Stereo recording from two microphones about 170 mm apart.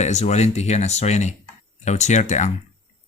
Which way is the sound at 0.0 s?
40° left (ahead or behind).